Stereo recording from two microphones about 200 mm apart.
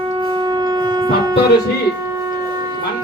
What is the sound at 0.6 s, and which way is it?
Shofar, 20° right (ahead or behind).